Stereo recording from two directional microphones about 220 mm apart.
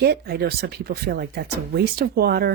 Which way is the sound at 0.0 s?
45° right (ahead or behind).